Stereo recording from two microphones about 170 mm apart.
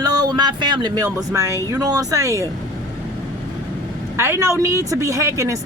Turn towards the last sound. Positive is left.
turn(degrees=-15)  # may be behind; listen again after turning